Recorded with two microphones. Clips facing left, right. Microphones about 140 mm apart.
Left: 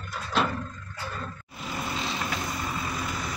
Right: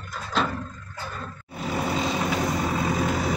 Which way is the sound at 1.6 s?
55° right (ahead or behind).